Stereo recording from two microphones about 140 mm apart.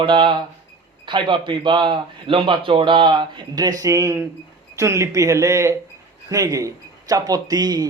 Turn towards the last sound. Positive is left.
turn(degrees=-30)  # may be behind; listen again after turning